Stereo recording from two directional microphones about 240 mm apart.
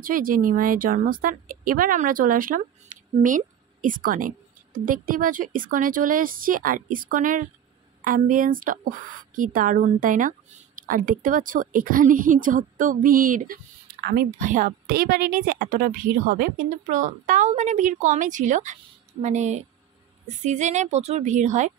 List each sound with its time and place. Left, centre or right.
0.0 s a woman's voice: right